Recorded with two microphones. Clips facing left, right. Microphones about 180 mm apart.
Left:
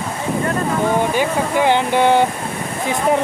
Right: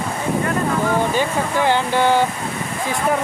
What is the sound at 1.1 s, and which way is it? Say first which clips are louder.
Speech: left 2 dB; 15° left (ahead or behind).